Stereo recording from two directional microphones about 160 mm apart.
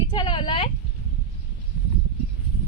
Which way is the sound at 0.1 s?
30° left (ahead or behind).